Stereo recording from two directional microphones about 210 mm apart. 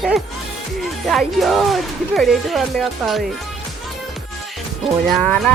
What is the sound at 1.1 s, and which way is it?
Speech, centre (ahead or behind).